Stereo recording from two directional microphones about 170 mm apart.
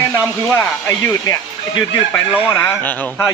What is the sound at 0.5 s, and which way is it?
Speech, 15° left (ahead or behind).